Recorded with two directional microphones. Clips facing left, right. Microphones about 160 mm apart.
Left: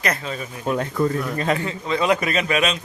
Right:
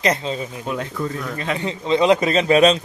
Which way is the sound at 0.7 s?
45° left (ahead or behind).